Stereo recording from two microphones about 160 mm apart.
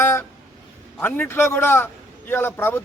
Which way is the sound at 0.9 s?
10° left (ahead or behind).